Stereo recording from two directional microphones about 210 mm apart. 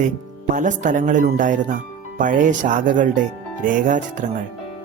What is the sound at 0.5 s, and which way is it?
Speech, 35° right (ahead or behind).